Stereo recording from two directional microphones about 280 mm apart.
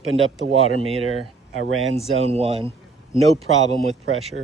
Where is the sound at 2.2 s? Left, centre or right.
Right.